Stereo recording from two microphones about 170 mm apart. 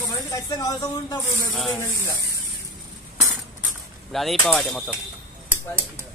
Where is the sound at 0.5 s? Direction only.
25° left (ahead or behind).